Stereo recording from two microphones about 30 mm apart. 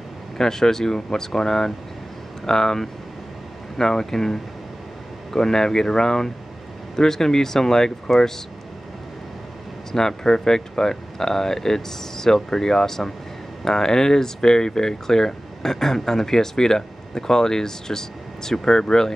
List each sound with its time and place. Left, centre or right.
0.4 s speech: centre
9.9 s speech: centre